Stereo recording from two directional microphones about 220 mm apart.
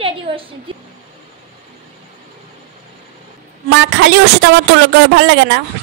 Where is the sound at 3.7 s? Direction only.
50° right (ahead or behind).